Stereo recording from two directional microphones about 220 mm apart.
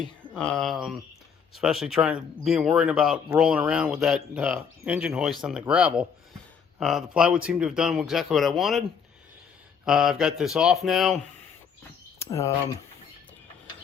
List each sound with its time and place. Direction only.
0.2 s speech: 5° left (ahead or behind)
9.8 s speech: 5° right (ahead or behind)
12.2 s speech: 15° left (ahead or behind)